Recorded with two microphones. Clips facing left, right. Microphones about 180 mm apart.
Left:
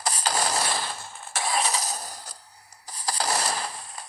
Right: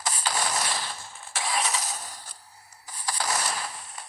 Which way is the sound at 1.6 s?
35° left (ahead or behind).